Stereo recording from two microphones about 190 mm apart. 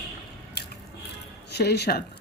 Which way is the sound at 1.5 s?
60° left (ahead or behind).